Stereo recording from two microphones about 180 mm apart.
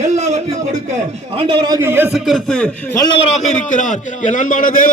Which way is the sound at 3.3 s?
40° left (ahead or behind).